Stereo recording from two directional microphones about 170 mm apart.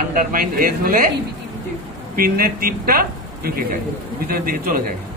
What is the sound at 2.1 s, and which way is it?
A man's voice, 60° right (ahead or behind).